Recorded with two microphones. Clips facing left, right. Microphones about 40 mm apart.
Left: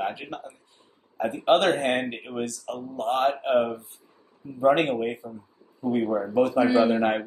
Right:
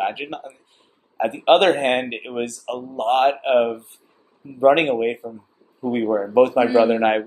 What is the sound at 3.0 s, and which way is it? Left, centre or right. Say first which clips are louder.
Speech: right 6 dB; right.